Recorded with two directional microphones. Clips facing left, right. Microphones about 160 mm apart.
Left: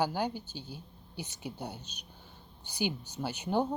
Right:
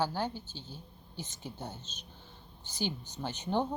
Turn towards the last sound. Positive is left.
turn(degrees=10)  # may be behind; listen again after turning